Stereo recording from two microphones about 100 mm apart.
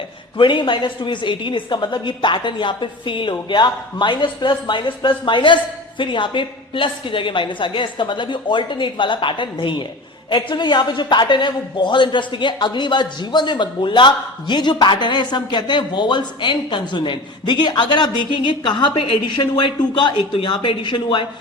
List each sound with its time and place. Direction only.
0.3 s a man's voice: 55° left (ahead or behind)